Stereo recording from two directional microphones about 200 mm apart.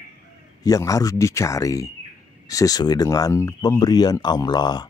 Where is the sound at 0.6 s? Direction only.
15° left (ahead or behind).